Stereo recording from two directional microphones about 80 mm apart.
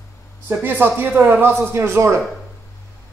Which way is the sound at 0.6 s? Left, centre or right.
Right.